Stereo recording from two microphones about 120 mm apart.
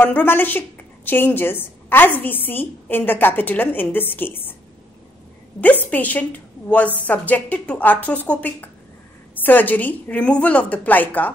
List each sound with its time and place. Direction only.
0.0 s a woman's voice: 15° left (ahead or behind)
5.6 s a woman's voice: 15° left (ahead or behind)